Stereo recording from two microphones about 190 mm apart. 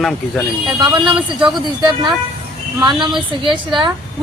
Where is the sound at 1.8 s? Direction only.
25° right (ahead or behind).